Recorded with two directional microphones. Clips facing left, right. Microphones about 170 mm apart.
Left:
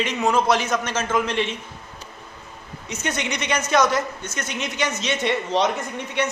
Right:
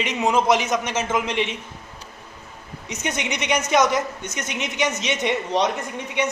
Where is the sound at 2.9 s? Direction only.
15° right (ahead or behind).